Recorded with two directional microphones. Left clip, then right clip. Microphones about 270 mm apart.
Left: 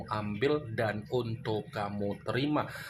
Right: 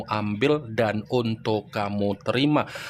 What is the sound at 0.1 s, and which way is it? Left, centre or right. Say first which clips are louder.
Speech: right 7 dB; right.